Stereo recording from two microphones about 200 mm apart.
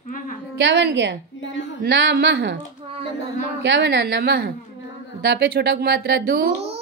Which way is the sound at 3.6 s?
60° right (ahead or behind).